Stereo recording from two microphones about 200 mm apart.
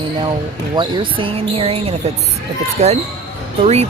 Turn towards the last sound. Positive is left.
turn(degrees=-30)  # may be behind; listen again after turning